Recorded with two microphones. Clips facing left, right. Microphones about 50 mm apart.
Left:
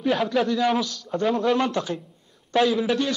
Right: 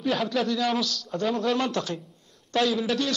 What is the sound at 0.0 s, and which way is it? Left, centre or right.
A man's voice, centre.